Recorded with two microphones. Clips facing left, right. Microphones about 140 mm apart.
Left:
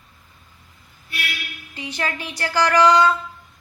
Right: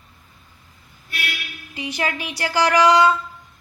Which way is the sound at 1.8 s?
10° right (ahead or behind).